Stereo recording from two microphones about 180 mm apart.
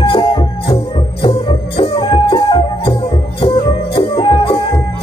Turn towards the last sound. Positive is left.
turn(degrees=30)  # may be behind; listen again after turning